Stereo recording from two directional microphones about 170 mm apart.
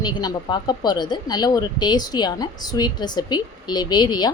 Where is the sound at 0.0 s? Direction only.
25° left (ahead or behind).